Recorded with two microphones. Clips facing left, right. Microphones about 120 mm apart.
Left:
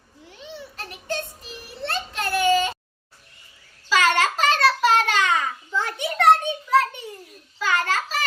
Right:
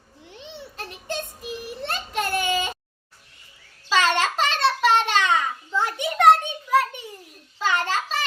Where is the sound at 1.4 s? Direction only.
15° right (ahead or behind).